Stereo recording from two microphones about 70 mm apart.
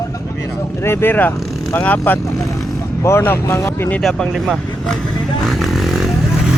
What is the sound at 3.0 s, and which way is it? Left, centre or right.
Speech, left.